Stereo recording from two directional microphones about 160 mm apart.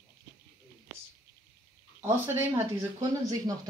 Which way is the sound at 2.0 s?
15° right (ahead or behind).